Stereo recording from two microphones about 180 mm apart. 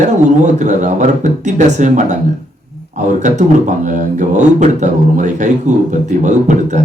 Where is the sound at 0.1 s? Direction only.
40° right (ahead or behind).